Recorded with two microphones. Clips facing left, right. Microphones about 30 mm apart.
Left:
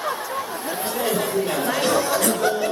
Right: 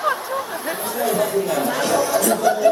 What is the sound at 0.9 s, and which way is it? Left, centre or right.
Chatter, left.